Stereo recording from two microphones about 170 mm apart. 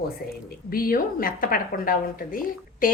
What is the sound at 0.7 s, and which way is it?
A woman's voice, 60° left (ahead or behind).